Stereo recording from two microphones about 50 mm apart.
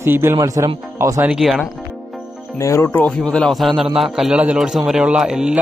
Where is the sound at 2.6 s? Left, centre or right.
Left.